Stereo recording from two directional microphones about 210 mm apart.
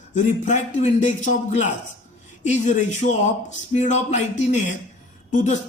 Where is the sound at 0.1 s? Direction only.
35° left (ahead or behind).